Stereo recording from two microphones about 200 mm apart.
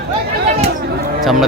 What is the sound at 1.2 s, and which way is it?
Speech, centre (ahead or behind).